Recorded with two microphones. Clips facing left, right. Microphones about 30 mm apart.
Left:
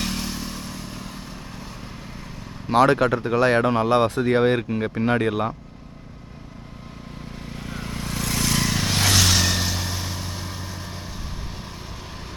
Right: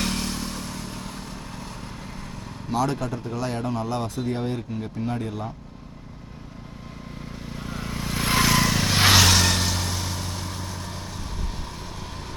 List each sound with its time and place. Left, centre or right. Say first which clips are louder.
0.0 s motorcycle: right 1 dB; centre
2.7 s speech: left 9 dB; left
7.5 s vehicle: even; centre
8.2 s vehicle: right 5 dB; right
8.4 s vehicle: right 2 dB; centre
9.0 s vehicle: right 3 dB; right
9.2 s vehicle: right 1 dB; centre